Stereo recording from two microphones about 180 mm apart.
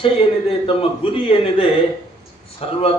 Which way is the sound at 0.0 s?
30° left (ahead or behind).